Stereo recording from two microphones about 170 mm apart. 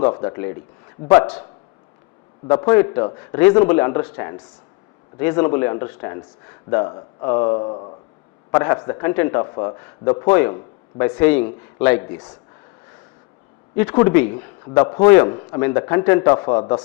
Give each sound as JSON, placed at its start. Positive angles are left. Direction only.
{"t": 0.1, "sound": "a man's voice", "side_deg": 25}
{"t": 2.5, "sound": "a man's voice", "side_deg": 20}
{"t": 8.4, "sound": "speech", "side_deg": 20}
{"t": 9.4, "sound": "a man's voice", "side_deg": 25}
{"t": 10.2, "sound": "speech", "side_deg": 10}
{"t": 13.7, "sound": "speech", "side_deg": 10}
{"t": 14.7, "sound": "a man's voice", "side_deg": 25}
{"t": 15.4, "sound": "a man's voice", "side_deg": 25}